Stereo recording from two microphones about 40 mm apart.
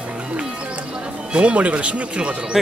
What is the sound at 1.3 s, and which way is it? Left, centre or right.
Speech, right.